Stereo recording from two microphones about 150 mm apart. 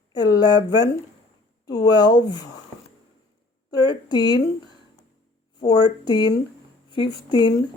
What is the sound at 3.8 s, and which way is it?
Speech, 30° left (ahead or behind).